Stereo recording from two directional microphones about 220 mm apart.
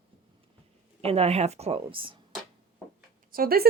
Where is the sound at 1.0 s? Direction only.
30° right (ahead or behind).